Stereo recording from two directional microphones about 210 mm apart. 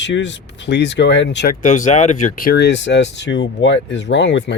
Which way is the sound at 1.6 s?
35° left (ahead or behind).